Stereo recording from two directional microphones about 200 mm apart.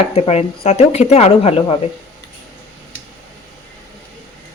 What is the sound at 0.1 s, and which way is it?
Speech, 30° left (ahead or behind).